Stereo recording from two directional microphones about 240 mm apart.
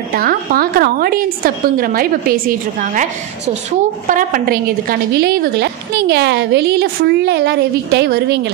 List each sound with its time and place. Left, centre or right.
0.1 s a woman's voice: right